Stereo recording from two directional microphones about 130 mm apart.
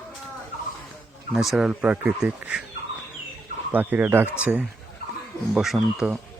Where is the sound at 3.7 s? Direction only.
15° right (ahead or behind).